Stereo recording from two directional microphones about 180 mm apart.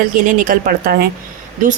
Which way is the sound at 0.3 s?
50° right (ahead or behind).